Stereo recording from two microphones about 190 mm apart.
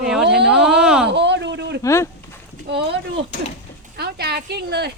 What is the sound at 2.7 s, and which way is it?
Speech, 65° right (ahead or behind).